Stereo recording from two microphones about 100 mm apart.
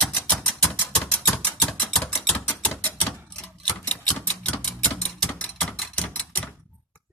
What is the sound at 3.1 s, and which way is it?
Typewriter, 10° left (ahead or behind).